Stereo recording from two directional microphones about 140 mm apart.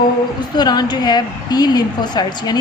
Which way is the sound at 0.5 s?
30° left (ahead or behind).